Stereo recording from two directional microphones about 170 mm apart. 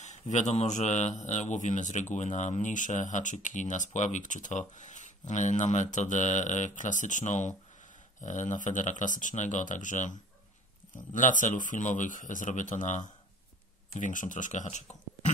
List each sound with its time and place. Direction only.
0.0 s a man's voice: 45° left (ahead or behind)